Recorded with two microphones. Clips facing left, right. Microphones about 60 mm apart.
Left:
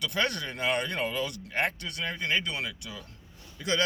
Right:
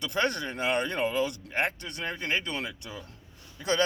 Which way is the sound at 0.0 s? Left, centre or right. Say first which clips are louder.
Right 1 dB; right.